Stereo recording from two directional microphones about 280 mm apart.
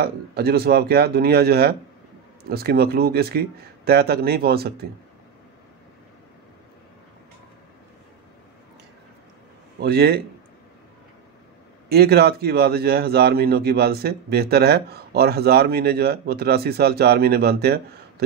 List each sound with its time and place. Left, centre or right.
0.0 s a man's voice: right
9.8 s a man's voice: right
11.9 s a man's voice: right